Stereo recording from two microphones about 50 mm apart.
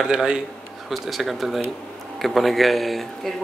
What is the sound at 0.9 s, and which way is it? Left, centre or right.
Speech, centre.